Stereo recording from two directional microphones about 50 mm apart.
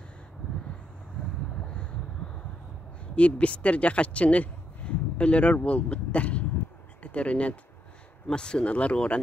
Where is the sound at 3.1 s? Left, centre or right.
Left.